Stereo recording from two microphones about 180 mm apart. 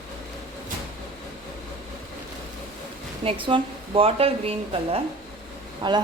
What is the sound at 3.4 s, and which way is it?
Speech, 30° right (ahead or behind).